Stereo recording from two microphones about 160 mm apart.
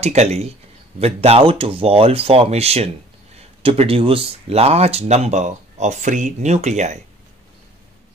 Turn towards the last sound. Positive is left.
turn(degrees=-45)  # may be behind; listen again after turning